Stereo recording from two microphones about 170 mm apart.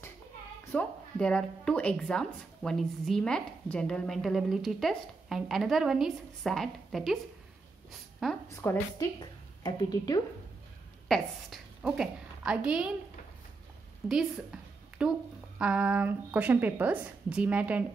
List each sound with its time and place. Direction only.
0.7 s a woman's voice: 5° left (ahead or behind)
8.2 s a woman's voice: centre (ahead or behind)
8.5 s a woman's voice: 20° left (ahead or behind)
11.1 s a woman's voice: centre (ahead or behind)
14.0 s a sound: 5° right (ahead or behind)
15.6 s a woman's voice: 5° right (ahead or behind)